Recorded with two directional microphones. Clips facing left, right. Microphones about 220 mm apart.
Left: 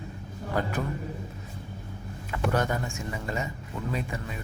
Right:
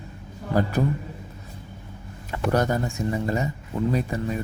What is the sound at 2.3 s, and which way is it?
Speech, 35° right (ahead or behind).